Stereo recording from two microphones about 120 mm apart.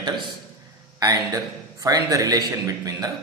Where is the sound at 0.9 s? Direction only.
30° right (ahead or behind).